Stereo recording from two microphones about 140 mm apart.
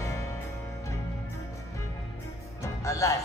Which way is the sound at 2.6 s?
20° left (ahead or behind).